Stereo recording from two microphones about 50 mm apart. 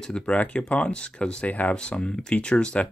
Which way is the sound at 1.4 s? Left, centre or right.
Left.